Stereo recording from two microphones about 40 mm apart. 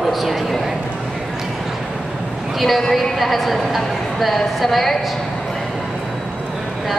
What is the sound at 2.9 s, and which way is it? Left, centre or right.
A woman's voice, centre.